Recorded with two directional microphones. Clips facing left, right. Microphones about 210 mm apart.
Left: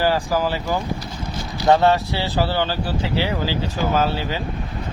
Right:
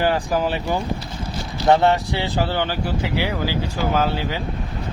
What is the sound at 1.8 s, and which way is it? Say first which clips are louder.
Speech: left 1 dB; 15° right (ahead or behind).